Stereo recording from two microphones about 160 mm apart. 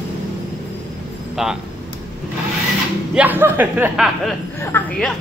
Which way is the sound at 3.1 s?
10° right (ahead or behind).